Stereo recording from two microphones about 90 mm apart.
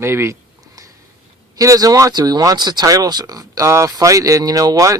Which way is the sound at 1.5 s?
40° right (ahead or behind).